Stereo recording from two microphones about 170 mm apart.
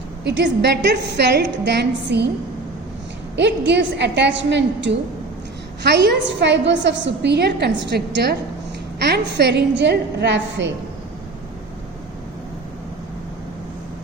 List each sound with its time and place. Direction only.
0.3 s a woman's voice: 90° right
3.3 s a woman's voice: 90° right